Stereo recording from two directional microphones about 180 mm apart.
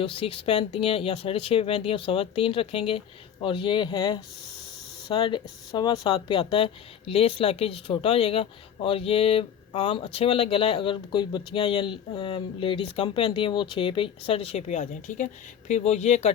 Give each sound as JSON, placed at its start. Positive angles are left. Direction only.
{"t": 0.0, "sound": "speech", "side_deg": 30}